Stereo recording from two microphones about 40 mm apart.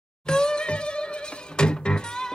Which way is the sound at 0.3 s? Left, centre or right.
Left.